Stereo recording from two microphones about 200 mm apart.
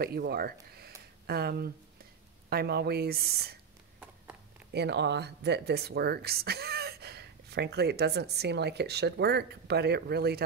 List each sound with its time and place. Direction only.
0.0 s a woman's voice: 50° right (ahead or behind)
4.7 s speech: 60° right (ahead or behind)